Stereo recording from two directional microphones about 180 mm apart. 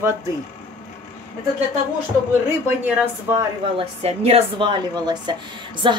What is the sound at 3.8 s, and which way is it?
A woman's voice, 35° right (ahead or behind).